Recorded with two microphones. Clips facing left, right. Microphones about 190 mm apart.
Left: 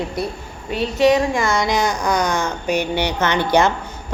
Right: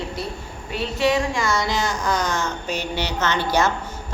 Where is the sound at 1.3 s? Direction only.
55° left (ahead or behind).